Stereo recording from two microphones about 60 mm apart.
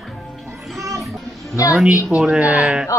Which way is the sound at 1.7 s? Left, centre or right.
Centre.